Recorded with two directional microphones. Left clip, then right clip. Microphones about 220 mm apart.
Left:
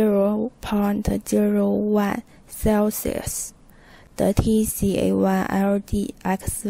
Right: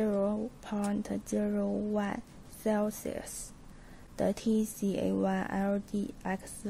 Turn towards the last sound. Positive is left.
turn(degrees=35)  # may be behind; listen again after turning